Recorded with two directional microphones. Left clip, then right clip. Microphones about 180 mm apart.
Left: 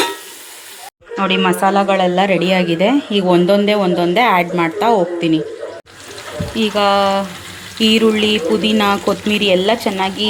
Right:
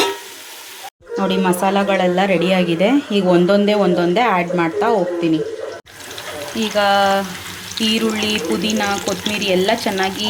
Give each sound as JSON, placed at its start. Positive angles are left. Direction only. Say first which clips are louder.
{"t": 1.1, "sound": "speech", "louder": "left 3 dB", "side_deg": -10}
{"t": 6.6, "sound": "speech", "louder": "left 1 dB", "side_deg": 15}